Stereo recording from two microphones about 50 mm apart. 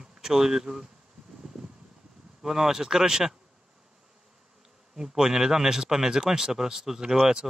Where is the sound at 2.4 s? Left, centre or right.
Centre.